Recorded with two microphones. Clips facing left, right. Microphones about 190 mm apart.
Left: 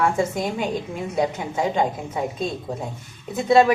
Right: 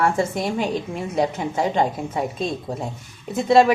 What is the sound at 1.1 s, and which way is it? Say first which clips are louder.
Speech: right 1 dB; centre (ahead or behind).